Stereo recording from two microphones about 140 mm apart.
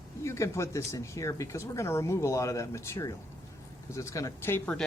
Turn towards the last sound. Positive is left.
turn(degrees=15)  # may be behind; listen again after turning